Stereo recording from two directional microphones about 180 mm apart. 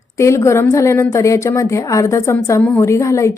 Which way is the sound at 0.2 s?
15° left (ahead or behind).